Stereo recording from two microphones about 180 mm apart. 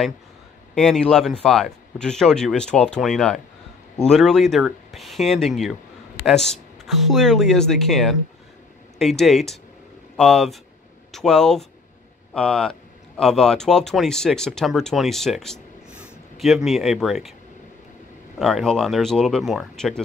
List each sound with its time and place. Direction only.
0.7 s speech: 5° left (ahead or behind)
18.4 s speech: centre (ahead or behind)